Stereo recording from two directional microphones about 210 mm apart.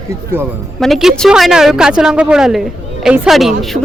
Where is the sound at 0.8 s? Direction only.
Centre (ahead or behind).